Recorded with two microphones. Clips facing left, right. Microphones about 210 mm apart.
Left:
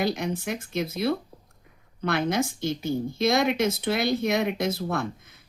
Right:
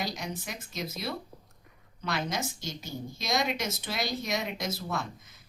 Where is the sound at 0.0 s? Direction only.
55° left (ahead or behind).